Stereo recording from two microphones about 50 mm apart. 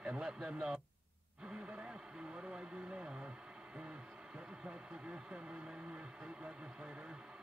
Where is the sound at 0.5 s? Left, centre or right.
Centre.